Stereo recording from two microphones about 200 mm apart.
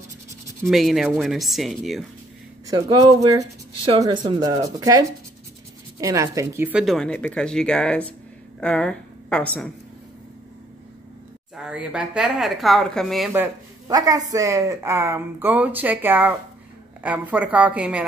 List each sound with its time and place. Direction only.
0.7 s speech: centre (ahead or behind)
2.7 s a woman's voice: 20° right (ahead or behind); by 9.7 s 5° left (ahead or behind)
11.5 s speech: 5° right (ahead or behind)
13.3 s speech: 15° right (ahead or behind)